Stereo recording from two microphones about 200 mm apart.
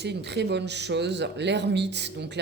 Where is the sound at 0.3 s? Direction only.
60° right (ahead or behind).